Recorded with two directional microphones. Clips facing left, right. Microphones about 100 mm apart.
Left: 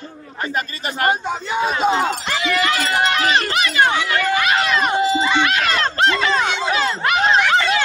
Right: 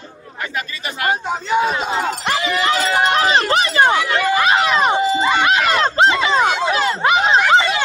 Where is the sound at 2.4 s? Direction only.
35° right (ahead or behind).